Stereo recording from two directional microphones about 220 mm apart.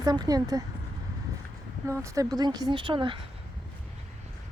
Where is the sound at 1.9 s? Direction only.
15° right (ahead or behind).